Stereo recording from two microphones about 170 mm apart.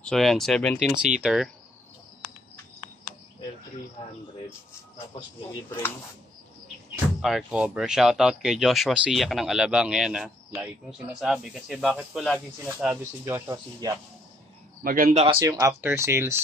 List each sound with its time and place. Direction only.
0.0 s speech: centre (ahead or behind)
7.2 s speech: centre (ahead or behind)
13.2 s speech: 15° right (ahead or behind)
14.8 s speech: 55° right (ahead or behind)
15.4 s speech: 20° right (ahead or behind)